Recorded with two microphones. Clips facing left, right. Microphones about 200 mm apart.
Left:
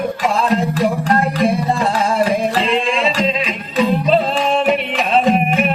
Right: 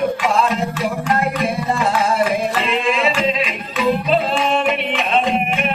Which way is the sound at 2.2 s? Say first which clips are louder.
Left 2 dB; 30° left (ahead or behind).